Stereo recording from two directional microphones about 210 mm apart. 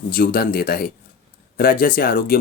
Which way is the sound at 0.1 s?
45° left (ahead or behind).